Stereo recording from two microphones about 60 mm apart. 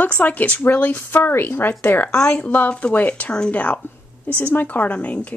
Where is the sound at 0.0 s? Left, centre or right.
Left.